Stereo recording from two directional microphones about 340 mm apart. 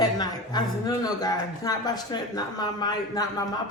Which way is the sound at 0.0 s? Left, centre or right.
Centre.